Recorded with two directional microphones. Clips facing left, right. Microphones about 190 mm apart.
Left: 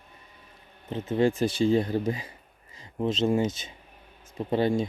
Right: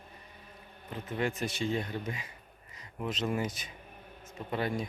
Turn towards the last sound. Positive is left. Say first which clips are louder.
# left 9 dB
turn(degrees=30)  # may be behind; listen again after turning